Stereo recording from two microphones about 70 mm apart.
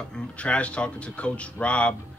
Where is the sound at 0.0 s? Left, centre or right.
Centre.